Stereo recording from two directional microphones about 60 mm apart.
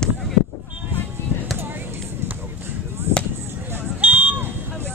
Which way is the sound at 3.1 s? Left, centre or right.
Right.